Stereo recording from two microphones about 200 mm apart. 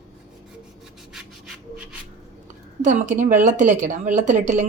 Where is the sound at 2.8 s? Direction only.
40° right (ahead or behind).